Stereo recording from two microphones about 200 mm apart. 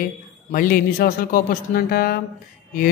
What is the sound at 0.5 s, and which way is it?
A man's voice, 45° left (ahead or behind).